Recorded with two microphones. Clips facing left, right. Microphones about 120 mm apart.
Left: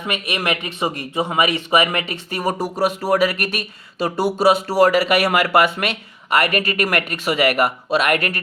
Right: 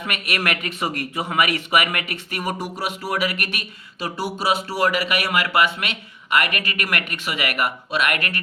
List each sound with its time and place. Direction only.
0.0 s speech: 20° left (ahead or behind); by 8.4 s 35° left (ahead or behind)